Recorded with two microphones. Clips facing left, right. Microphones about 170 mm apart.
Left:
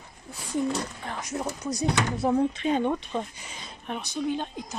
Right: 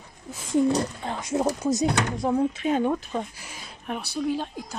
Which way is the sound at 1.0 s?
25° right (ahead or behind).